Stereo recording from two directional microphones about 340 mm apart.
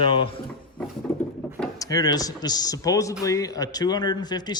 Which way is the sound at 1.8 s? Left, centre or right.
Centre.